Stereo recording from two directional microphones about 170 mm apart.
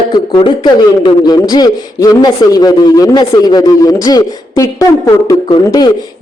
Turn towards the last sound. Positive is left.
turn(degrees=20)  # may be behind; listen again after turning